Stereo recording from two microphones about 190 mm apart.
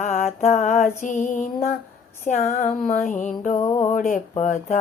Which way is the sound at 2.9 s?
45° left (ahead or behind).